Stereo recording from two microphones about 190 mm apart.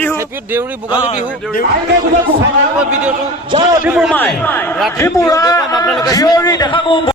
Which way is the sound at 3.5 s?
20° right (ahead or behind).